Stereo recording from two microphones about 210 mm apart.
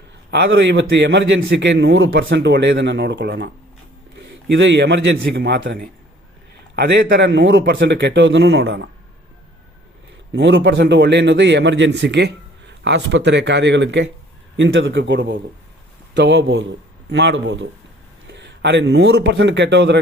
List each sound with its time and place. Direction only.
0.3 s a man's voice: 50° right (ahead or behind)
4.5 s a man's voice: 60° right (ahead or behind)
10.3 s a man's voice: 55° right (ahead or behind)